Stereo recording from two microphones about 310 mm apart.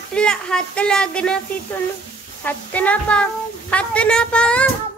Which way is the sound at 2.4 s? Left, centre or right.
Centre.